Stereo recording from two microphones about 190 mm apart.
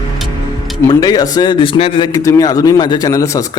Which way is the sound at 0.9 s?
20° left (ahead or behind).